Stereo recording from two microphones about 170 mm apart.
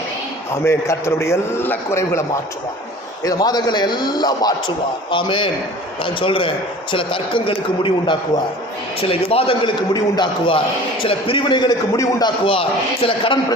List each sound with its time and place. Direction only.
0.5 s a man's voice: 15° left (ahead or behind)
3.2 s a man's voice: 25° left (ahead or behind)